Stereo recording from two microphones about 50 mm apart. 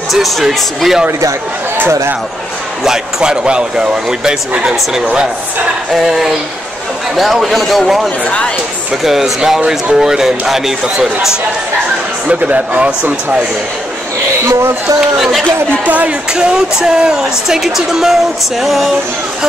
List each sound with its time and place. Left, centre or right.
0.1 s speech: centre
2.8 s speech: centre
6.0 s speech: centre
9.0 s speech: centre
12.3 s speech: right
14.5 s speech: right
15.0 s speech: centre
15.8 s speech: right
16.3 s speech: centre